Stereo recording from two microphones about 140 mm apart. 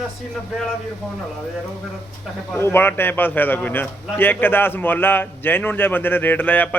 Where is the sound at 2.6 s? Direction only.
15° left (ahead or behind).